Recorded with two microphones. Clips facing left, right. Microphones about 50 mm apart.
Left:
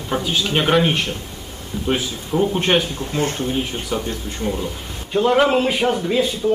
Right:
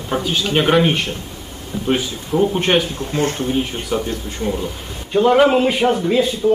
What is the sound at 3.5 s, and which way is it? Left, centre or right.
A man's voice, centre.